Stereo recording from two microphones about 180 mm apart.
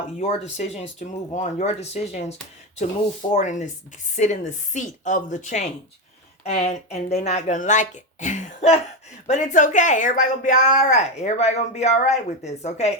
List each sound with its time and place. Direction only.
0.2 s a woman's voice: 40° left (ahead or behind)
3.3 s a woman's voice: 40° left (ahead or behind)